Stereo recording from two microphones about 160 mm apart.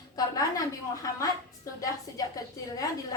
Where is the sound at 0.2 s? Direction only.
20° left (ahead or behind).